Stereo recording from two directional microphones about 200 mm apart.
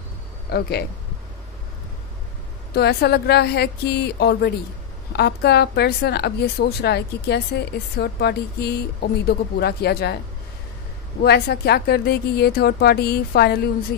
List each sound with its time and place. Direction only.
0.5 s a woman's voice: 55° left (ahead or behind)
2.7 s a woman's voice: 55° left (ahead or behind)
11.2 s a woman's voice: 50° left (ahead or behind)